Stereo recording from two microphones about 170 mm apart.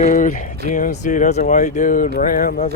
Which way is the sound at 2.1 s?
55° left (ahead or behind).